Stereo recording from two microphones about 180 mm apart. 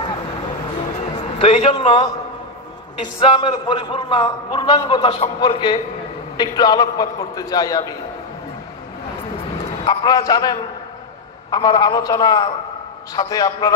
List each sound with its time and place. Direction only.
0.0 s a sound: 25° left (ahead or behind)
1.1 s a man's voice: 30° left (ahead or behind)
9.8 s a man's voice: 20° left (ahead or behind)